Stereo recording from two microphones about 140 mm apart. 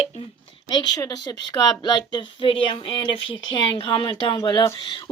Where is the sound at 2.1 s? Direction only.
35° left (ahead or behind).